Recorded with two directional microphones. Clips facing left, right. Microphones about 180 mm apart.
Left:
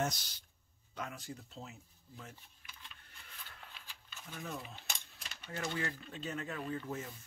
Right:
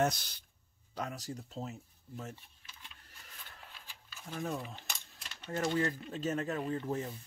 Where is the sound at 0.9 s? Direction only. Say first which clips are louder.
Right 4 dB; 40° right (ahead or behind).